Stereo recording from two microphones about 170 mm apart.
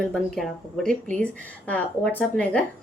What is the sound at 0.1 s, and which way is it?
Speech, 5° left (ahead or behind).